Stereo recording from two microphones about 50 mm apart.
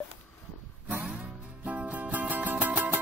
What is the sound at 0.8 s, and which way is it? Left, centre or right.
Music, right.